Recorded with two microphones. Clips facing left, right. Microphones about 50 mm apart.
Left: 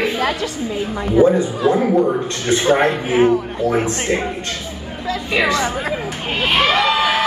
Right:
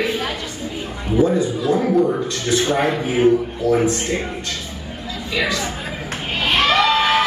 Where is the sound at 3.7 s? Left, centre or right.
Left.